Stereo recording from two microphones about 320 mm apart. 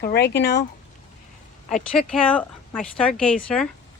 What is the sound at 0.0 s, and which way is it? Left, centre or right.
Speech, left.